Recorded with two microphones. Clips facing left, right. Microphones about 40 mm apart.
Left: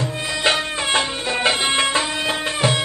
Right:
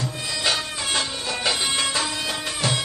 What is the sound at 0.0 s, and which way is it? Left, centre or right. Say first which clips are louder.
Music: left 5 dB; left.